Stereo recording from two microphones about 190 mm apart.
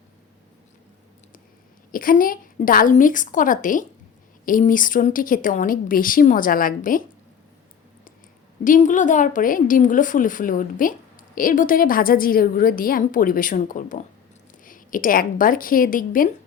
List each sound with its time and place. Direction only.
1.9 s a woman's voice: 45° left (ahead or behind)
8.6 s a woman's voice: 45° left (ahead or behind)